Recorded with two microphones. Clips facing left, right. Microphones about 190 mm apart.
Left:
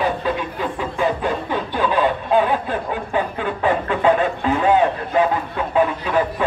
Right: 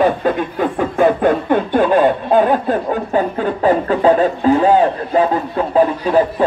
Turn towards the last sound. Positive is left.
turn(degrees=-35)  # may be behind; listen again after turning